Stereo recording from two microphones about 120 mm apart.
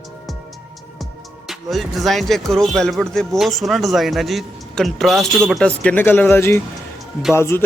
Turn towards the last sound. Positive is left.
turn(degrees=20)  # may be behind; listen again after turning